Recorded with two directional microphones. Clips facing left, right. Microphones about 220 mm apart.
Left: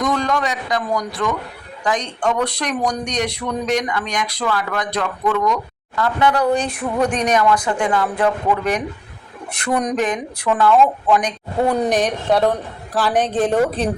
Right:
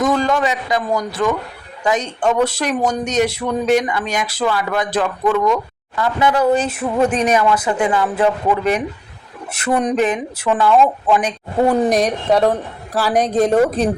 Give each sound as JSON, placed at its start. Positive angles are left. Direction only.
{"t": 0.0, "sound": "a man's voice", "side_deg": -5}
{"t": 11.9, "sound": "speech", "side_deg": -35}
{"t": 12.3, "sound": "speech", "side_deg": -10}
{"t": 13.1, "sound": "speech", "side_deg": -35}
{"t": 13.4, "sound": "speech", "side_deg": -10}